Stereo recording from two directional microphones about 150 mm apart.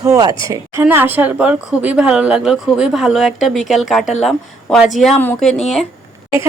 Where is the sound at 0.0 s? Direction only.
25° right (ahead or behind).